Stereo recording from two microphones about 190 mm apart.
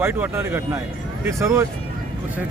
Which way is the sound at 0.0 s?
10° right (ahead or behind).